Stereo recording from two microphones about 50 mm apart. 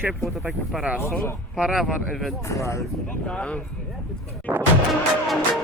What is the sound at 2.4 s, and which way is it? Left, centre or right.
Speech, left.